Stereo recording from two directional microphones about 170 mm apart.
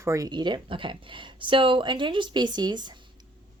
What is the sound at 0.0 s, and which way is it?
A woman's voice, 20° right (ahead or behind).